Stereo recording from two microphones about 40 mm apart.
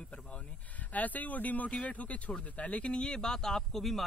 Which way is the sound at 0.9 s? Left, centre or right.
Left.